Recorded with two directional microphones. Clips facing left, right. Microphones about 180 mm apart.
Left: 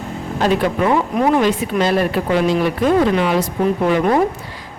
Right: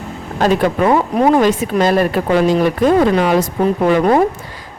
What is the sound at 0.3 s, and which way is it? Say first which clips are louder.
Speech: right 3 dB; 40° right (ahead or behind).